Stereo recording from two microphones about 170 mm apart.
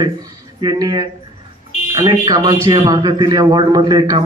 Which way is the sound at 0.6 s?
25° right (ahead or behind).